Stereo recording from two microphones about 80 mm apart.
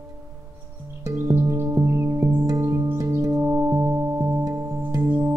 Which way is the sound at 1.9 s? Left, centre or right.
Right.